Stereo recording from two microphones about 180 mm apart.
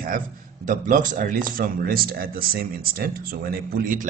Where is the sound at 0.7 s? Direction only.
45° right (ahead or behind).